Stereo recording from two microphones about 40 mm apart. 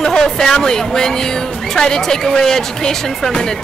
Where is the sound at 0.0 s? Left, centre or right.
Centre.